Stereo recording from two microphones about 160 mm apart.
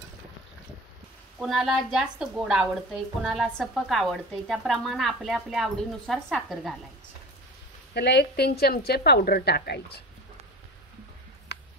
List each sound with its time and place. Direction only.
1.4 s a woman's voice: centre (ahead or behind)
7.9 s a woman's voice: 90° left
11.5 s a sound: 90° left